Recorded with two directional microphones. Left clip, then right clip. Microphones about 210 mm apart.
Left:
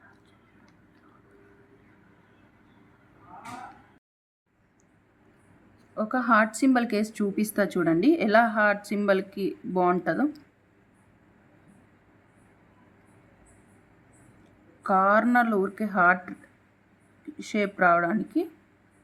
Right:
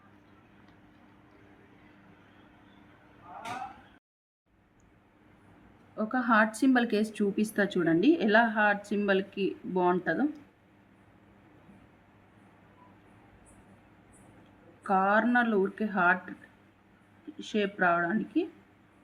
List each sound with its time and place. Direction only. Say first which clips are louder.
6.0 s speech: left 3 dB; 20° left (ahead or behind)
14.8 s speech: left 4 dB; 25° left (ahead or behind)
17.3 s speech: left 3 dB; 25° left (ahead or behind)